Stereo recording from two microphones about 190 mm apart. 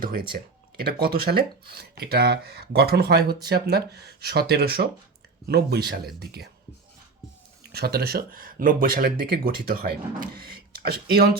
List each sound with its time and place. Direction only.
0.0 s speech: 50° right (ahead or behind)
7.7 s speech: 55° right (ahead or behind)